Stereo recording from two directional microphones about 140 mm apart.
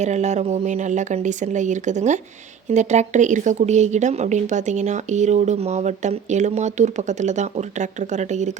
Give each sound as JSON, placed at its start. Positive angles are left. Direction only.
{"t": 0.0, "sound": "speech", "side_deg": -55}